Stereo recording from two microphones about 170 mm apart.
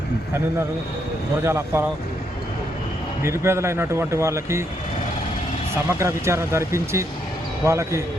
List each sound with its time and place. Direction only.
1.4 s a man's voice: 15° right (ahead or behind)
3.2 s a man's voice: 15° right (ahead or behind)
5.7 s a man's voice: 15° right (ahead or behind)